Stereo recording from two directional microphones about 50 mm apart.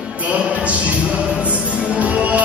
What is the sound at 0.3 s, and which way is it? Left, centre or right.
Speech, right.